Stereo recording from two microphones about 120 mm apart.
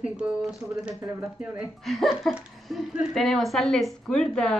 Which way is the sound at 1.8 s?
Centre (ahead or behind).